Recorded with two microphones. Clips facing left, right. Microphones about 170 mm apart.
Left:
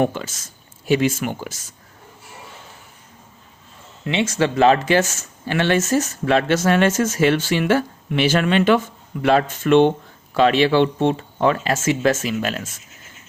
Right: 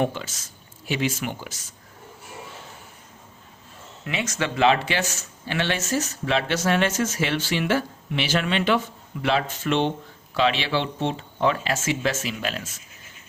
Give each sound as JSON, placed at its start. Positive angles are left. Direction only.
{"t": 0.0, "sound": "speech", "side_deg": 50}
{"t": 4.0, "sound": "speech", "side_deg": 25}